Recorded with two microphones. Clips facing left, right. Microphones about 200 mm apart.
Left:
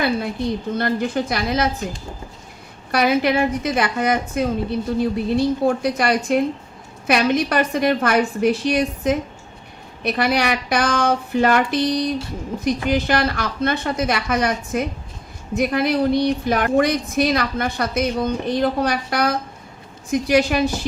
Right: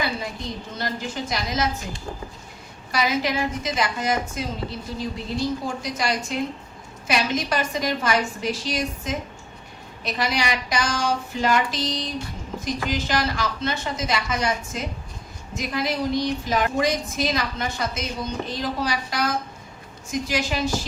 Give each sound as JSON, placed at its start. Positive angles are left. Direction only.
{"t": 0.7, "sound": "a woman's voice", "side_deg": 55}
{"t": 2.9, "sound": "a woman's voice", "side_deg": 60}